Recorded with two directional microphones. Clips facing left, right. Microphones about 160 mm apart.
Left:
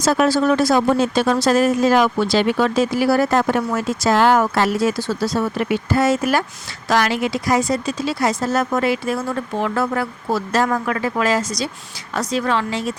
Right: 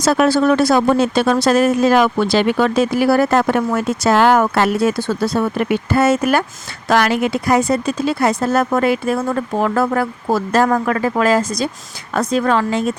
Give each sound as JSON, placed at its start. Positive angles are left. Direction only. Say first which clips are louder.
{"t": 0.0, "sound": "speech", "louder": "right 3 dB", "side_deg": -65}